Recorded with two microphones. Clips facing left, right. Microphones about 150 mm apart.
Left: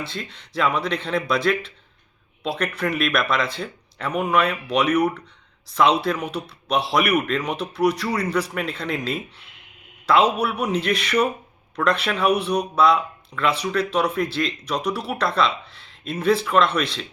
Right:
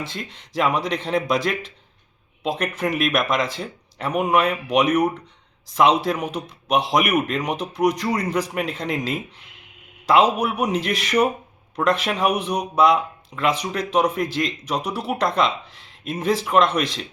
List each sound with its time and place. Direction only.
0.2 s speech: 15° right (ahead or behind)